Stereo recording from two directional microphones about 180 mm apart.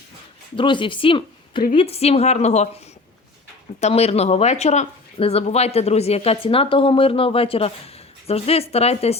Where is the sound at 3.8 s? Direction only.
35° left (ahead or behind).